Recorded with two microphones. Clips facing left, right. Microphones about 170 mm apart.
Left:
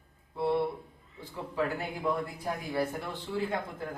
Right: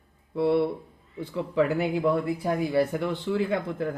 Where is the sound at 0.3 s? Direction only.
75° right (ahead or behind).